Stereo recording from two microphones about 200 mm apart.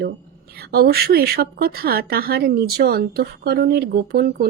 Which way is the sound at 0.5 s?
50° right (ahead or behind).